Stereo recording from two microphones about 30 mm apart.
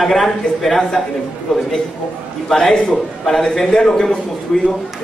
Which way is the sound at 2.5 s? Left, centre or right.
Centre.